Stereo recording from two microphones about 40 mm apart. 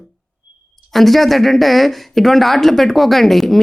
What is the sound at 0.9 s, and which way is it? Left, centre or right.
A woman's voice, centre.